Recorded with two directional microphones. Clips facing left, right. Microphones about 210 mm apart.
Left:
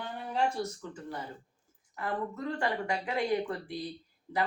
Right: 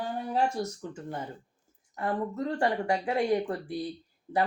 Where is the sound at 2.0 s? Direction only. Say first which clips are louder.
Right 4 dB; 35° right (ahead or behind).